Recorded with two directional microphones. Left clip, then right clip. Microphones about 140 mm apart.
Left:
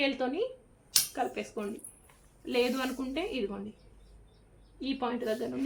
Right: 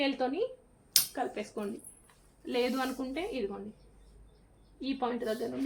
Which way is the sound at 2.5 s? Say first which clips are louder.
Left 2 dB; centre (ahead or behind).